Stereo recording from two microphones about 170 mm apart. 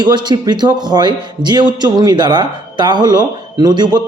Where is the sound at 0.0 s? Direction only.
25° right (ahead or behind).